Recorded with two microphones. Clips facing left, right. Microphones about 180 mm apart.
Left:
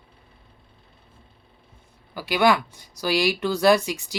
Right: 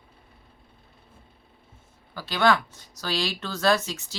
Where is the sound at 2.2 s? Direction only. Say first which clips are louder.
Left 3 dB; 10° left (ahead or behind).